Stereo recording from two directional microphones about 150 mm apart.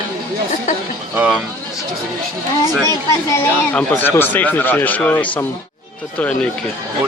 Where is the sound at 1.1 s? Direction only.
10° right (ahead or behind).